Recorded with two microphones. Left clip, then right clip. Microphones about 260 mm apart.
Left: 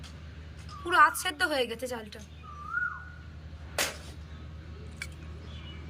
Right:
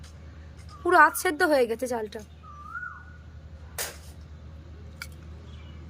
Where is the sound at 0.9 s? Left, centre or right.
Centre.